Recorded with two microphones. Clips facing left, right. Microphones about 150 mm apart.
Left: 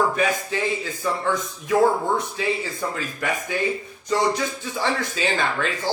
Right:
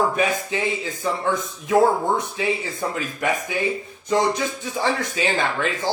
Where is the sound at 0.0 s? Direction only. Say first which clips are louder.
Right 1 dB; 20° right (ahead or behind).